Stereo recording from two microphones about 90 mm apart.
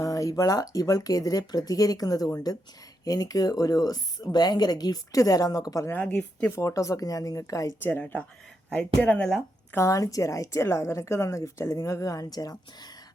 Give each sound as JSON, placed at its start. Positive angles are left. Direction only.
{"t": 0.0, "sound": "speech", "side_deg": 40}
{"t": 5.9, "sound": "a woman's voice", "side_deg": 15}
{"t": 6.5, "sound": "a woman's voice", "side_deg": 35}
{"t": 7.8, "sound": "a woman's voice", "side_deg": 20}
{"t": 9.7, "sound": "a woman's voice", "side_deg": 35}